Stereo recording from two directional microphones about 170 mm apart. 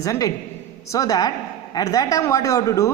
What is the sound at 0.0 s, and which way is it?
A man's voice, 20° left (ahead or behind).